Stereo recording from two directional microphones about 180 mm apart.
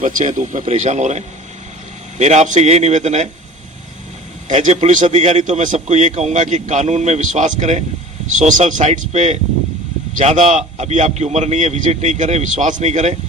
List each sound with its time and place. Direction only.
0.0 s a man's voice: 45° right (ahead or behind)
4.5 s a man's voice: 40° right (ahead or behind)